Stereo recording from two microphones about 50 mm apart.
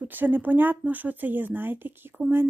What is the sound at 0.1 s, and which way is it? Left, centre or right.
Speech, right.